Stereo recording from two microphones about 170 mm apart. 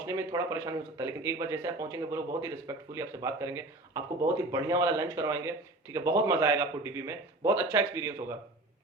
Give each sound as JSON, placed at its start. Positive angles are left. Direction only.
{"t": 0.0, "sound": "speech", "side_deg": -20}